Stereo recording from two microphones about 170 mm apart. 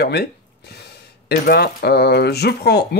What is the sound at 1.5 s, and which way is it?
Speech, 70° left (ahead or behind).